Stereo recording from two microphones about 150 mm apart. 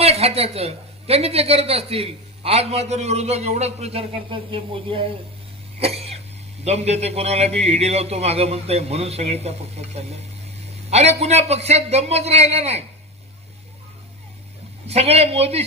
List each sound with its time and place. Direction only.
0.0 s a woman's voice: 40° right (ahead or behind)
5.8 s cough: 40° right (ahead or behind)
6.7 s a woman's voice: 45° right (ahead or behind)
14.8 s a woman's voice: 45° right (ahead or behind)